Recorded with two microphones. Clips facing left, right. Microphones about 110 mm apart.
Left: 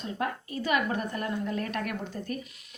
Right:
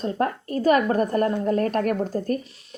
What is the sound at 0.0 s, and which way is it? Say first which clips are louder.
A woman's voice: right 8 dB; 45° right (ahead or behind).